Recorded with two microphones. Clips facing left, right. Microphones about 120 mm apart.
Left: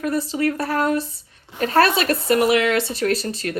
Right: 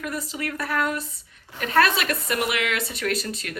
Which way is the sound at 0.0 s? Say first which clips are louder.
Left 9 dB; 35° left (ahead or behind).